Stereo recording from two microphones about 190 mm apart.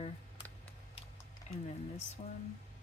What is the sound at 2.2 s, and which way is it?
Speech, 35° left (ahead or behind).